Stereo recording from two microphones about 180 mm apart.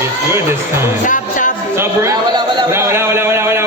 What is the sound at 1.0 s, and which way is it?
Music, 45° left (ahead or behind).